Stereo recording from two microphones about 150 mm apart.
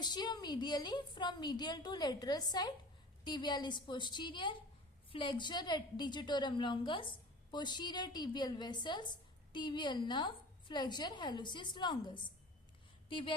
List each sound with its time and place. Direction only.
0.0 s a woman's voice: 30° left (ahead or behind)